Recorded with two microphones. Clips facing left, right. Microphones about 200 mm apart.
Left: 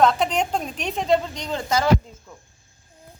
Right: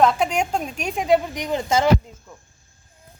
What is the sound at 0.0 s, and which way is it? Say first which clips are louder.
A woman's voice: right 1 dB; 5° right (ahead or behind).